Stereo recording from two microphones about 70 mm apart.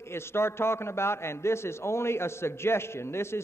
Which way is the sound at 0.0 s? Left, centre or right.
Left.